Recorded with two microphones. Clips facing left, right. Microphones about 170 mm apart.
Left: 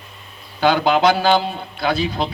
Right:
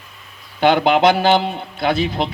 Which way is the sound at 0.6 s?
60° right (ahead or behind).